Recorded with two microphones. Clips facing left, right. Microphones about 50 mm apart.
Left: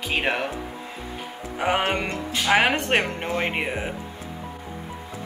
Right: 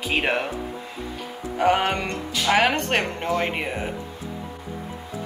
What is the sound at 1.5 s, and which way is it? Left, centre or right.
Speech, centre.